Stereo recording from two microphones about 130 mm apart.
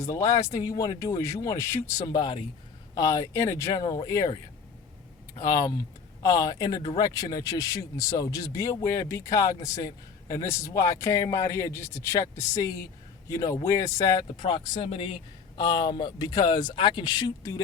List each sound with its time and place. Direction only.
0.0 s speech: 25° left (ahead or behind)
2.1 s speech: 35° left (ahead or behind)
5.4 s speech: 25° left (ahead or behind)